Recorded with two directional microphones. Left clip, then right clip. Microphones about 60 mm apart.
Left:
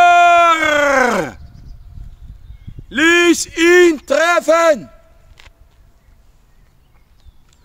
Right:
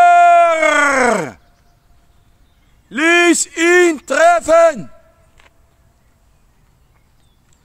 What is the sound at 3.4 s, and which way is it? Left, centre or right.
A man's voice, right.